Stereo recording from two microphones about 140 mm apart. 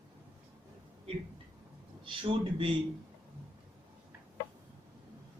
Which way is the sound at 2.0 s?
40° right (ahead or behind).